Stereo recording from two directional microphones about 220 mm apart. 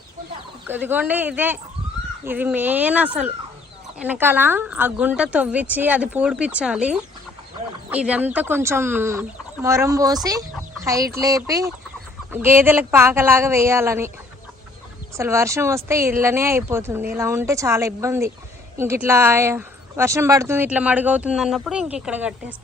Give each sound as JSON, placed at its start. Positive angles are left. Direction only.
{"t": 0.7, "sound": "speech", "side_deg": -10}
{"t": 15.1, "sound": "speech", "side_deg": -15}